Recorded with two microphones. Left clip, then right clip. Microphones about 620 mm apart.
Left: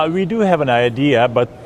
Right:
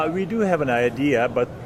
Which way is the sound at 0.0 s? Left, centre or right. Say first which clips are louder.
Left 6 dB; left.